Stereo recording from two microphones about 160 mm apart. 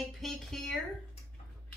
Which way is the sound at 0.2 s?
Centre (ahead or behind).